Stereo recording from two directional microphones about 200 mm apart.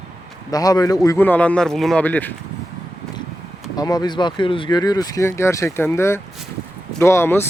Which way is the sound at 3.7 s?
20° left (ahead or behind).